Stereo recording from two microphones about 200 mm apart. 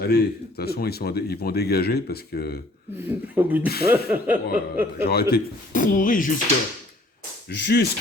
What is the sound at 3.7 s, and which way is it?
Speech, 50° left (ahead or behind).